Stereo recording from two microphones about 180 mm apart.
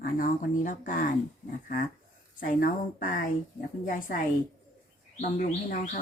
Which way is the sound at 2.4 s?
50° left (ahead or behind).